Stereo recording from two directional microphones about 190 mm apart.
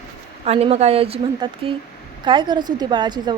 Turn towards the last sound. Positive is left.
turn(degrees=-25)  # may be behind; listen again after turning